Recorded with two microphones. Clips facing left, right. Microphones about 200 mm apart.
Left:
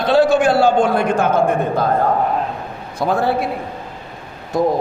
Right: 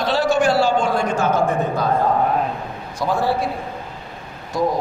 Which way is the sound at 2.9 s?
60° left (ahead or behind).